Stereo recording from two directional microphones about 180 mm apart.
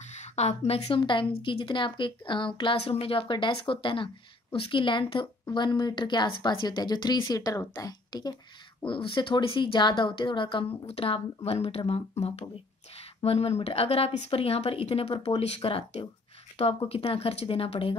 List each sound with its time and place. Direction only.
0.1 s a woman's voice: 40° left (ahead or behind)